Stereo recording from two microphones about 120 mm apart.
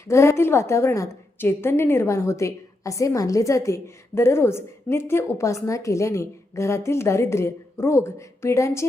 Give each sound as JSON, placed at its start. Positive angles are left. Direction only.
{"t": 0.1, "sound": "a woman's voice", "side_deg": 25}